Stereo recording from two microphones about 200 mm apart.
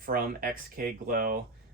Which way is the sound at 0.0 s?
45° right (ahead or behind).